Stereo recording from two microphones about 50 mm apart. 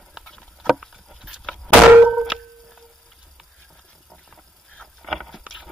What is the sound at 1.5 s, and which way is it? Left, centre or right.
Thunk, centre.